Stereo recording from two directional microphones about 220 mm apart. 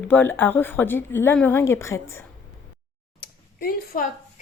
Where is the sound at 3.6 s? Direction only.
40° left (ahead or behind).